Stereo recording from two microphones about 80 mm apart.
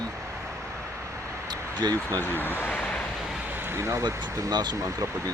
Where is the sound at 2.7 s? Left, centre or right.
Centre.